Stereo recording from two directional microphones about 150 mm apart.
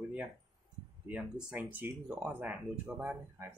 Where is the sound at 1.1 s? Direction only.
10° right (ahead or behind).